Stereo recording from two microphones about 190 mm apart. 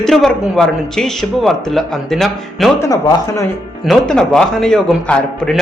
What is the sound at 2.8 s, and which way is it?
Speech, 15° left (ahead or behind).